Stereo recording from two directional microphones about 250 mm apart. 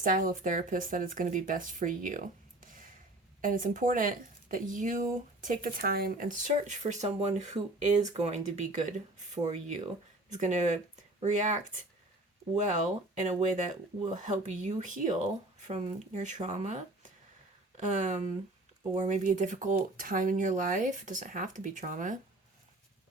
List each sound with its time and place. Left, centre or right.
0.0 s speech: right